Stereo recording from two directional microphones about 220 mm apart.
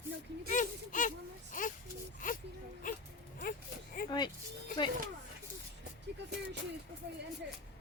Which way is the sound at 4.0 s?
40° left (ahead or behind).